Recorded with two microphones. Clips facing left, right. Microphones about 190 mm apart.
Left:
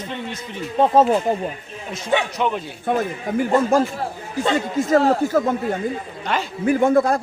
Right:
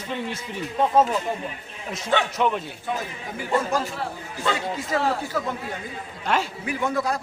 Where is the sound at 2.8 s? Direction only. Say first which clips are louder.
Left 8 dB; 50° left (ahead or behind).